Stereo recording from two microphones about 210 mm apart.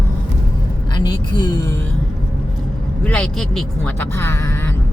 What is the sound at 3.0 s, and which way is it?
Speech, 5° left (ahead or behind).